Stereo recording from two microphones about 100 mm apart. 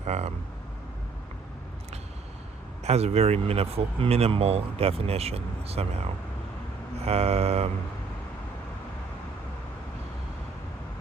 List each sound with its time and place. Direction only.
0.1 s speech: 90° right
2.8 s speech: 90° right